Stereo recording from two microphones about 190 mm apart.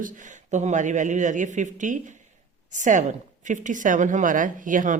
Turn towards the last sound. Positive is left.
turn(degrees=-45)  # may be behind; listen again after turning